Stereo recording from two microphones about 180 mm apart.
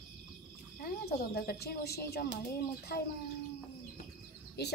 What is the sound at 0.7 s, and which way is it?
Speech, 60° left (ahead or behind).